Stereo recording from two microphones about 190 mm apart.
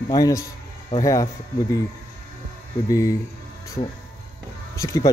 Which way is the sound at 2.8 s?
15° left (ahead or behind).